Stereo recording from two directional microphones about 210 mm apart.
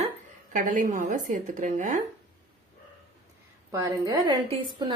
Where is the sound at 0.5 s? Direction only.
40° right (ahead or behind).